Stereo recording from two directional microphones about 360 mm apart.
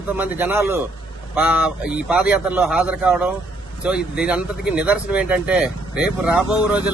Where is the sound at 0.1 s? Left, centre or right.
Centre.